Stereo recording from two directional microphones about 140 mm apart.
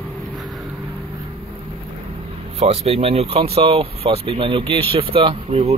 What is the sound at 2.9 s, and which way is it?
Speech, 45° right (ahead or behind).